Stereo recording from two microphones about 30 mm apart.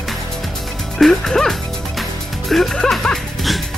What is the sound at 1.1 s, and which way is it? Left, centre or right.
Speech, centre.